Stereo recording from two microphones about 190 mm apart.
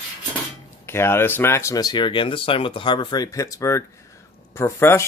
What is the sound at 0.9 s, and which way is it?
Speech, 15° left (ahead or behind).